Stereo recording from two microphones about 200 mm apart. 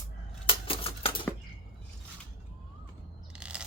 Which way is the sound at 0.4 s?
25° left (ahead or behind).